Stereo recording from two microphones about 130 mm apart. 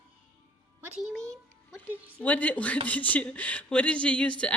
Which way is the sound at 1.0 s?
5° left (ahead or behind).